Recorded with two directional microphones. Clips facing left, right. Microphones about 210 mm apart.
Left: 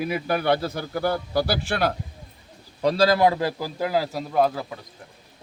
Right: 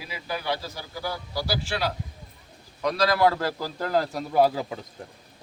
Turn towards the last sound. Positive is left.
turn(degrees=0)  # may be behind; listen again after turning